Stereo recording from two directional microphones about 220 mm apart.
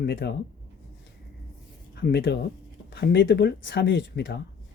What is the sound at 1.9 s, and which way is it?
Speech, 45° left (ahead or behind).